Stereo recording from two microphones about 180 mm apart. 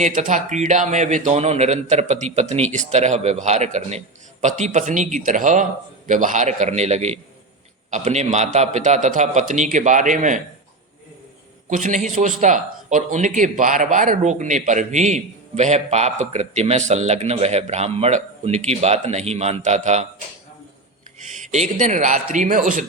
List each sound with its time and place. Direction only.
0.0 s a man's voice: 45° right (ahead or behind)
11.7 s speech: 45° right (ahead or behind)
21.2 s a man's voice: 40° right (ahead or behind)